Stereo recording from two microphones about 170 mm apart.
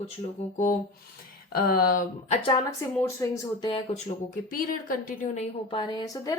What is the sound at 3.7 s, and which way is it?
Speech, 30° left (ahead or behind).